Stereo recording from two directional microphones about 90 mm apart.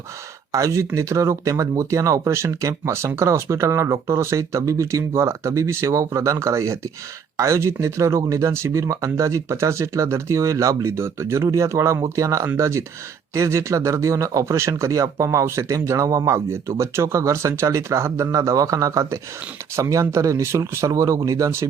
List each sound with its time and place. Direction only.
0.5 s speech: 35° right (ahead or behind)